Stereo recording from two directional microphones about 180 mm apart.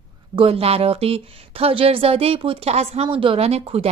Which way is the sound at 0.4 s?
35° right (ahead or behind).